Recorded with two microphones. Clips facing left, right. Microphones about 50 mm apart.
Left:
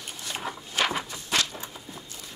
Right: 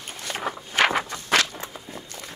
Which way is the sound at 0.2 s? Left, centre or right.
Right.